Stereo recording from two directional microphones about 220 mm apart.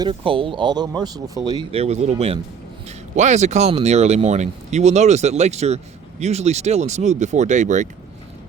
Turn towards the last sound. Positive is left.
turn(degrees=-35)  # may be behind; listen again after turning